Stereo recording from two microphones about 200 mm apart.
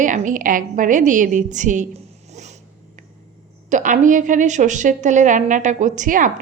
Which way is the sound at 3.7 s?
40° right (ahead or behind).